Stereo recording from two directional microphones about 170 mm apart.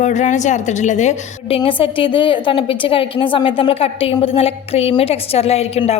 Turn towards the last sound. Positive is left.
turn(degrees=40)  # may be behind; listen again after turning